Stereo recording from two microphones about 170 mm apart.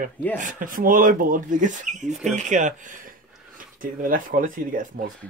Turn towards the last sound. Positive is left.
turn(degrees=-55)  # may be behind; listen again after turning